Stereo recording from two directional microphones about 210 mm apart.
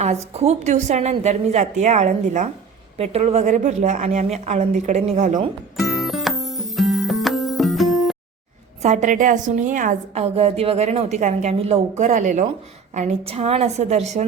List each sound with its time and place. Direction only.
0.0 s a woman's voice: 30° right (ahead or behind)
5.7 s music: centre (ahead or behind)
8.8 s a woman's voice: 35° right (ahead or behind)